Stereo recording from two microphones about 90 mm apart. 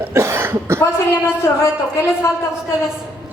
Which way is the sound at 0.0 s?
35° right (ahead or behind).